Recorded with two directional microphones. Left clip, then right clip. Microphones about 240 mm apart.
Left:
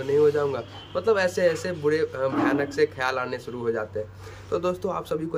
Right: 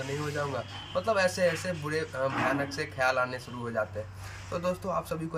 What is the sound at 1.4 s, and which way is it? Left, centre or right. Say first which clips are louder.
Speech: left 6 dB; left.